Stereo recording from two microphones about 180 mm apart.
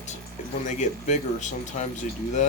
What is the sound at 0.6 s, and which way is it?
Speech, 40° left (ahead or behind).